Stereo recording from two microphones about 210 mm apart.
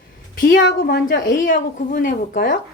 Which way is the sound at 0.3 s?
45° left (ahead or behind).